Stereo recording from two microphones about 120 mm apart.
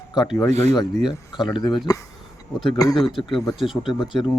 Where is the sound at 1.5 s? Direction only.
40° left (ahead or behind).